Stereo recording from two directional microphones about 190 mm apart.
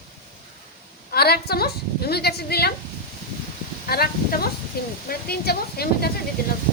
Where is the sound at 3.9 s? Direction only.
55° left (ahead or behind).